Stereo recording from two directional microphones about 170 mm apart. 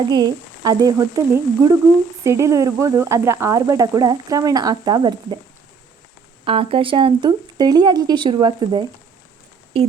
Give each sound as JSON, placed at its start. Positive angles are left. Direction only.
{"t": 0.0, "sound": "speech", "side_deg": -25}
{"t": 6.4, "sound": "speech", "side_deg": -30}